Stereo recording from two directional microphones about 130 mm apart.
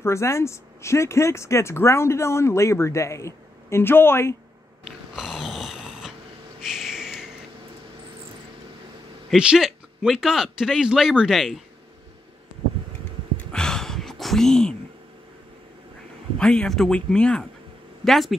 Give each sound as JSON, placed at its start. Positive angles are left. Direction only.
{"t": 0.0, "sound": "speech", "side_deg": 20}
{"t": 4.8, "sound": "snoring", "side_deg": -5}
{"t": 6.6, "sound": "a sound", "side_deg": 0}
{"t": 9.3, "sound": "a man's voice", "side_deg": -5}
{"t": 13.4, "sound": "a sound", "side_deg": 5}
{"t": 16.3, "sound": "a man's voice", "side_deg": 5}